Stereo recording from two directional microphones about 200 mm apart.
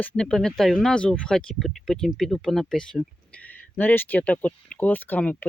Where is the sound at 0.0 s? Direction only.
5° left (ahead or behind).